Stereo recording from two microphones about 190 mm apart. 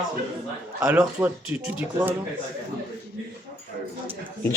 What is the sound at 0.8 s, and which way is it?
Speech, 10° right (ahead or behind).